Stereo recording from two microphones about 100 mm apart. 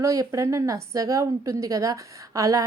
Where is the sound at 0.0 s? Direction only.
35° right (ahead or behind).